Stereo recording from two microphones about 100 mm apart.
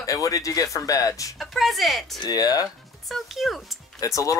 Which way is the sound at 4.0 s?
35° left (ahead or behind).